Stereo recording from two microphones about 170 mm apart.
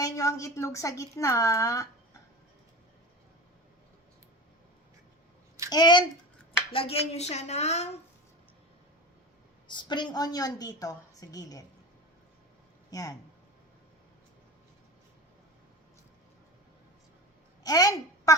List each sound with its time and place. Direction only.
0.0 s a woman's voice: 20° left (ahead or behind)
5.7 s a woman's voice: 25° left (ahead or behind)
9.6 s a woman's voice: 25° left (ahead or behind)
12.9 s speech: 20° left (ahead or behind)
17.6 s a sound: 20° left (ahead or behind)